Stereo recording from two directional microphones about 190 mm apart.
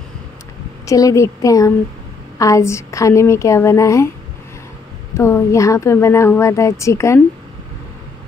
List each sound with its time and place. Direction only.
0.8 s a woman's voice: 15° left (ahead or behind)
5.1 s a woman's voice: 15° left (ahead or behind)